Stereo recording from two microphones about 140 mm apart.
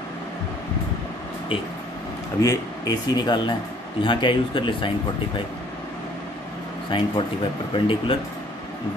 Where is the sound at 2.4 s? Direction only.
25° left (ahead or behind).